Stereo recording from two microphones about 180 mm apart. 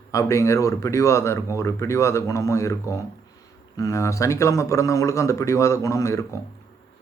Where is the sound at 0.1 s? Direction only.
15° left (ahead or behind).